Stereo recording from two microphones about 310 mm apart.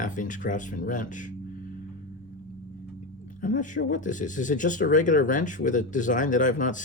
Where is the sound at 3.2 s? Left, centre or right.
Left.